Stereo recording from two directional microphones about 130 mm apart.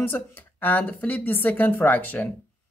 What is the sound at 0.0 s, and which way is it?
Speech, 15° left (ahead or behind).